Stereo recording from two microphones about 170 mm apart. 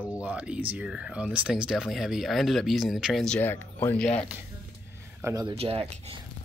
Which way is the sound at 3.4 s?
10° left (ahead or behind).